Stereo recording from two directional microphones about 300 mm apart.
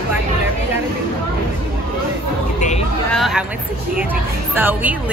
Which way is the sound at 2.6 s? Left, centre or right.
Left.